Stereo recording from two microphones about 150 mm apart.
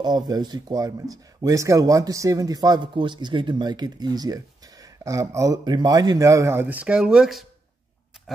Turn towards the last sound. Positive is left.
turn(degrees=-5)  # may be behind; listen again after turning